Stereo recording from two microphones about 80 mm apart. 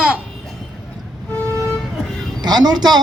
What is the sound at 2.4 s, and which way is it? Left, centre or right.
Speech, right.